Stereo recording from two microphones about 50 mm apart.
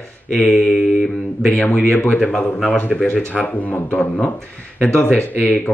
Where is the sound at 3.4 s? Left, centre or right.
Left.